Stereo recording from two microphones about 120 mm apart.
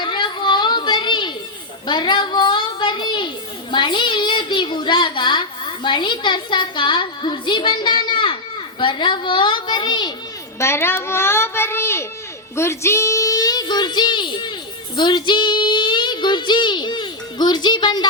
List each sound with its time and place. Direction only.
0.0 s a sound: 40° left (ahead or behind)
1.9 s a child's voice: 40° left (ahead or behind)
10.6 s a child's voice: 20° left (ahead or behind); by 18.1 s 35° left (ahead or behind)